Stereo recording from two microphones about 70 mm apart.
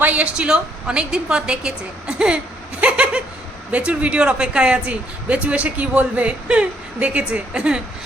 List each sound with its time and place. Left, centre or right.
0.0 s speech: right
2.8 s a sound: centre
3.7 s speech: centre